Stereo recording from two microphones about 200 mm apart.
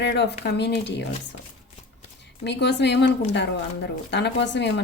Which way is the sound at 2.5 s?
60° left (ahead or behind).